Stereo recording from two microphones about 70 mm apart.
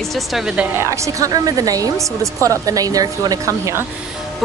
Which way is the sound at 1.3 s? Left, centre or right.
Right.